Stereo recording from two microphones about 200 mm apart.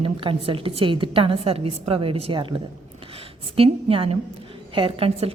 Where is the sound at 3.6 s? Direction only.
30° right (ahead or behind).